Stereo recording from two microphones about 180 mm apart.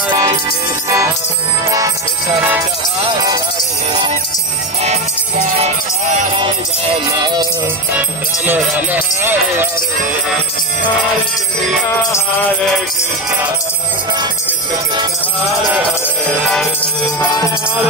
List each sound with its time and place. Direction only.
0.1 s music: 25° right (ahead or behind)
4.8 s music: 40° right (ahead or behind)
7.1 s music: 25° right (ahead or behind)
8.5 s speech: 10° right (ahead or behind)